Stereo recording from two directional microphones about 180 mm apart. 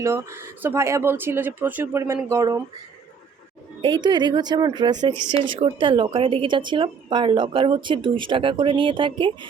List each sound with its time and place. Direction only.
0.0 s speech: 15° right (ahead or behind)
3.8 s speech: 25° right (ahead or behind)